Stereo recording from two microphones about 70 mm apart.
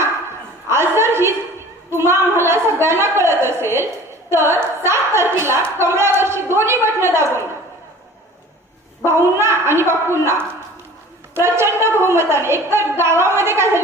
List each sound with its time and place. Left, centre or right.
0.7 s a sound: right
1.9 s a woman's voice: right
9.0 s a woman's voice: right